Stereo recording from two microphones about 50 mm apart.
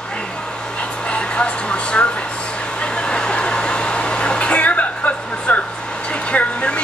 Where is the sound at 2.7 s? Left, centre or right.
Centre.